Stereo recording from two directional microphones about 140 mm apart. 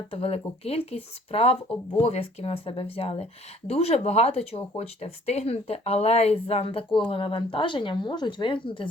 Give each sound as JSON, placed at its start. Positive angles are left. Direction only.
{"t": 0.1, "sound": "a woman's voice", "side_deg": 45}